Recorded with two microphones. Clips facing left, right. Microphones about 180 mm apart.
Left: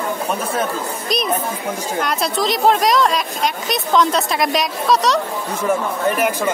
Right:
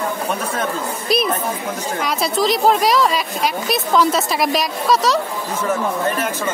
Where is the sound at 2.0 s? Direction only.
Centre (ahead or behind).